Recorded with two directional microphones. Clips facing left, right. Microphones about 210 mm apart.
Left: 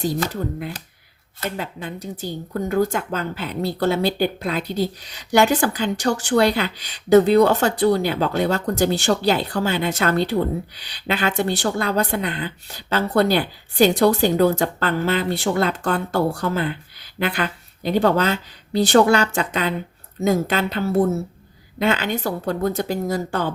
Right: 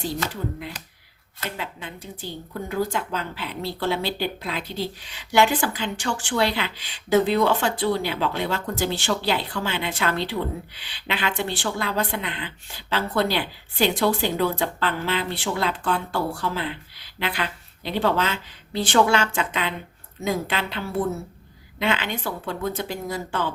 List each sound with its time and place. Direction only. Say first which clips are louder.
0.0 s speech: left 5 dB; 45° left (ahead or behind)